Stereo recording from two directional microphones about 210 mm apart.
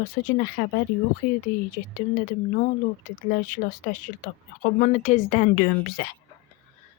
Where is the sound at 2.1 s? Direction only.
40° left (ahead or behind).